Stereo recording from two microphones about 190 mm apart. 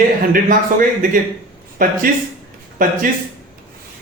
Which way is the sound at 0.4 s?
45° right (ahead or behind).